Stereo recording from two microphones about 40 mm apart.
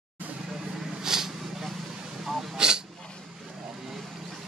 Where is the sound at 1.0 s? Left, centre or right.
Centre.